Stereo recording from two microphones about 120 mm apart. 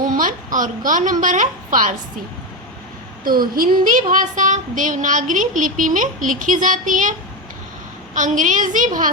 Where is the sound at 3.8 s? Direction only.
90° right.